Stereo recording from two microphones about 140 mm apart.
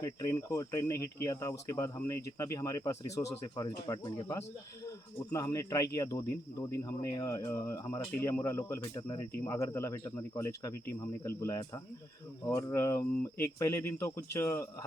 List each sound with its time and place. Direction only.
0.0 s speech: 25° left (ahead or behind)